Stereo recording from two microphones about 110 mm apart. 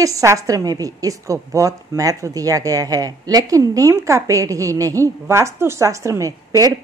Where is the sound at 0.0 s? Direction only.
30° right (ahead or behind).